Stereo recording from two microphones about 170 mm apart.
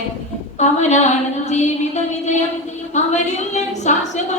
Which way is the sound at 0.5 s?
45° left (ahead or behind).